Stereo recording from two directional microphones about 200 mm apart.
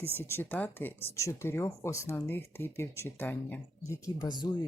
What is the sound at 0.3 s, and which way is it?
Speech, 10° left (ahead or behind).